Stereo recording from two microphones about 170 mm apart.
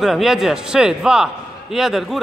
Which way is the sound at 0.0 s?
Centre (ahead or behind).